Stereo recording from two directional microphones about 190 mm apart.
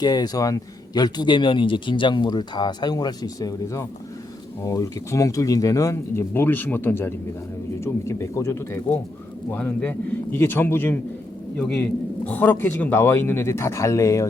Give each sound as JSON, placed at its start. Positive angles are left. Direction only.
{"t": 0.0, "sound": "speech", "side_deg": 20}